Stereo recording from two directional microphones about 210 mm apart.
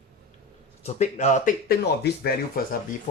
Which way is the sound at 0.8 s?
35° left (ahead or behind).